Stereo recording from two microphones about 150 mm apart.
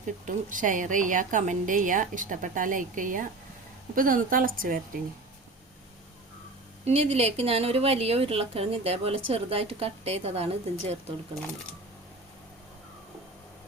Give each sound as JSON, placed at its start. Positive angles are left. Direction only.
{"t": 0.0, "sound": "a woman's voice", "side_deg": -60}
{"t": 6.8, "sound": "a woman's voice", "side_deg": -45}